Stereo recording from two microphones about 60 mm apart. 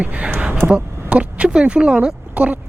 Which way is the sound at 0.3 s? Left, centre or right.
Right.